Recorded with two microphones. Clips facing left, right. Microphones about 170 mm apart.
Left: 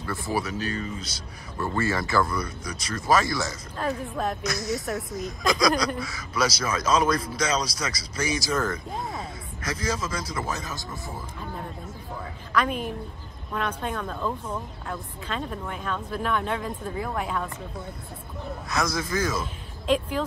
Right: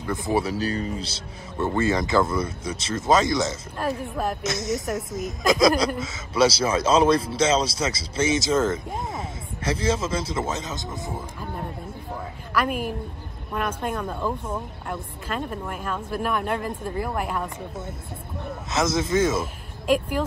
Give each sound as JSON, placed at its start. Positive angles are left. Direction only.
{"t": 0.0, "sound": "speech", "side_deg": -20}
{"t": 4.6, "sound": "speech", "side_deg": 0}
{"t": 5.9, "sound": "speech", "side_deg": -20}
{"t": 12.5, "sound": "speech", "side_deg": -5}
{"t": 18.7, "sound": "speech", "side_deg": -25}
{"t": 19.4, "sound": "speech", "side_deg": -5}